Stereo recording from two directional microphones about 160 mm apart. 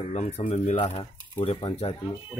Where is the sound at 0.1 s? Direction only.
45° left (ahead or behind); by 1.9 s 30° left (ahead or behind).